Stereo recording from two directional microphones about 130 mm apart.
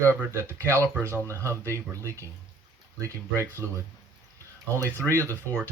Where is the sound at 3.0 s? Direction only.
20° right (ahead or behind).